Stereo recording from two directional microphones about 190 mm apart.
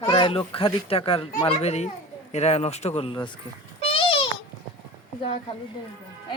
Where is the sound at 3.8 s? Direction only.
30° left (ahead or behind).